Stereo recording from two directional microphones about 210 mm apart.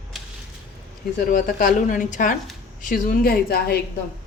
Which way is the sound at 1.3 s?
40° left (ahead or behind).